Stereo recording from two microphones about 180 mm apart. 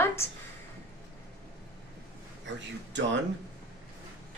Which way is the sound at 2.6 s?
85° right.